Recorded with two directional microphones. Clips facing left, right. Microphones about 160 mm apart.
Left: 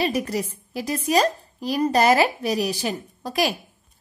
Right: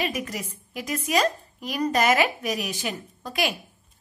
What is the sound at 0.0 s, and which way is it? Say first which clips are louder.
A woman's voice: left 6 dB; 35° left (ahead or behind).